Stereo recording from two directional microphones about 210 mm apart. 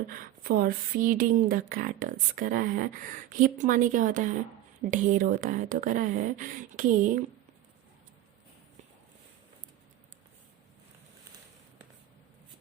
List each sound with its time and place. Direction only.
0.1 s speech: 45° right (ahead or behind)